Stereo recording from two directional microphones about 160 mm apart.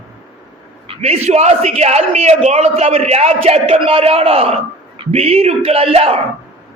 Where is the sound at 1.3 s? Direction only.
45° right (ahead or behind).